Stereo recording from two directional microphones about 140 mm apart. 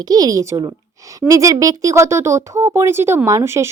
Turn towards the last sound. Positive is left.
turn(degrees=-20)  # may be behind; listen again after turning